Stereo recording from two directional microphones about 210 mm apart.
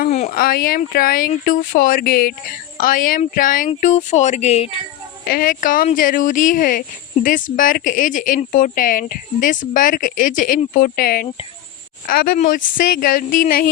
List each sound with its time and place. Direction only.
0.1 s a sound: 30° left (ahead or behind)
0.3 s speech: 45° left (ahead or behind)
5.2 s speech: 45° left (ahead or behind)